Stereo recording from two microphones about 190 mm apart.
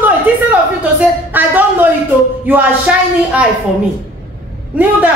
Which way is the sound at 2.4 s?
10° right (ahead or behind).